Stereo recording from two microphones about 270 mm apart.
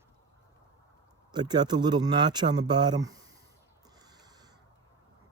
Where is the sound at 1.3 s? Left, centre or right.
Centre.